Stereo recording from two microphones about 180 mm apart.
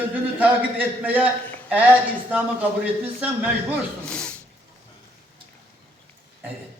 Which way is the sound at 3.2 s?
10° right (ahead or behind).